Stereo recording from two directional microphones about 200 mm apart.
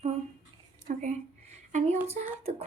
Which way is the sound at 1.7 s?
35° right (ahead or behind).